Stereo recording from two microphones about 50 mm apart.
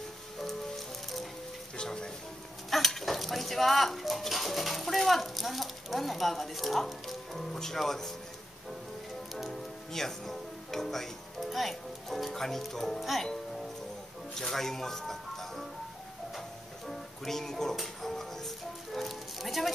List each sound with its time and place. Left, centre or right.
0.4 s music: centre
1.8 s speech: centre
2.7 s speech: centre
9.3 s music: centre
9.9 s speech: centre
14.3 s music: centre